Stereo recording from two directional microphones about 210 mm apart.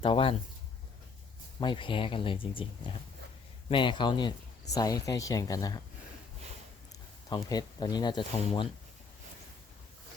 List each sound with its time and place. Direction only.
0.0 s speech: 25° left (ahead or behind)
1.6 s speech: 25° left (ahead or behind)
7.3 s speech: 20° left (ahead or behind)